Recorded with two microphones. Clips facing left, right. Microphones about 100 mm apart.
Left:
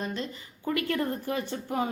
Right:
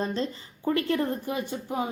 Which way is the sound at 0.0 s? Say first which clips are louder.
Right 5 dB; 35° right (ahead or behind).